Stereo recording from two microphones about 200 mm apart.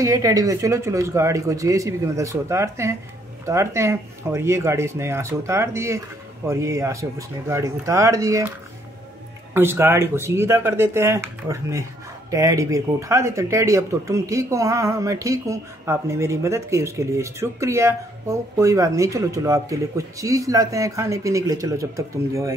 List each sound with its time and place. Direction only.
0.0 s speech: 15° right (ahead or behind)